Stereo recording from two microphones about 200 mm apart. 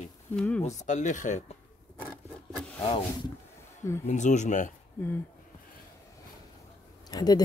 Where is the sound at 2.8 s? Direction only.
25° left (ahead or behind).